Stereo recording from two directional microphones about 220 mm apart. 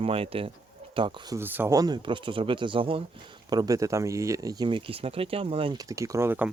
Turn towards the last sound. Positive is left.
turn(degrees=-10)  # may be behind; listen again after turning